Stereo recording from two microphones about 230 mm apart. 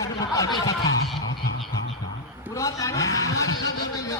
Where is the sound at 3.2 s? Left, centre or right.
Left.